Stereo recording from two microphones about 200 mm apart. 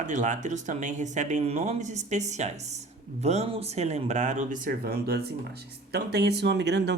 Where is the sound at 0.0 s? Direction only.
40° right (ahead or behind).